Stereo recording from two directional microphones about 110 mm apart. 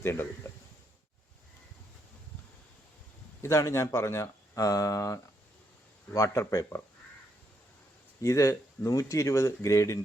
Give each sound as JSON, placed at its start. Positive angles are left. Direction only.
{"t": 0.0, "sound": "speech", "side_deg": 25}
{"t": 3.4, "sound": "speech", "side_deg": 25}
{"t": 8.2, "sound": "speech", "side_deg": 30}